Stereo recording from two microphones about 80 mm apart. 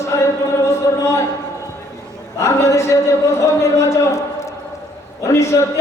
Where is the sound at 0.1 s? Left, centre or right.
Left.